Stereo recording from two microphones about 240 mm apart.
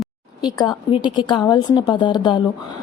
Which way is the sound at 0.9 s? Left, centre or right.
Left.